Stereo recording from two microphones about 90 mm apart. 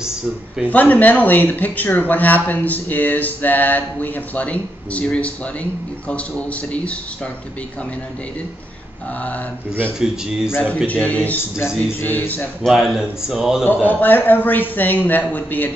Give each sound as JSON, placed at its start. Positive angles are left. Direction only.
{"t": 0.7, "sound": "speech", "side_deg": 20}
{"t": 9.9, "sound": "a man's voice", "side_deg": -5}
{"t": 10.9, "sound": "a man's voice", "side_deg": 15}
{"t": 12.6, "sound": "speech", "side_deg": -5}
{"t": 13.7, "sound": "speech", "side_deg": 20}